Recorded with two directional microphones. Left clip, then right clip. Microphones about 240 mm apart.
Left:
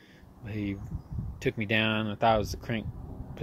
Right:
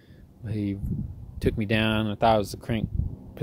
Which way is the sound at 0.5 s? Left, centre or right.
Right.